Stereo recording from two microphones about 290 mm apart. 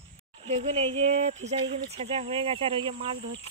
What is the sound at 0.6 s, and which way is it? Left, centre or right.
Speech, right.